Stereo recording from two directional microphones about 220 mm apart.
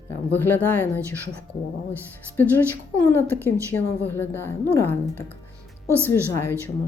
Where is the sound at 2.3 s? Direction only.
10° left (ahead or behind).